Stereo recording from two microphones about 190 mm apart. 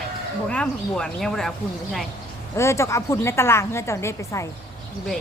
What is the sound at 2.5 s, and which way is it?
A woman's voice, 15° left (ahead or behind).